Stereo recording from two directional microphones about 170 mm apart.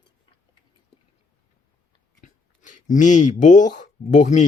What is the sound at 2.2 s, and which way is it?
Biting, 50° left (ahead or behind).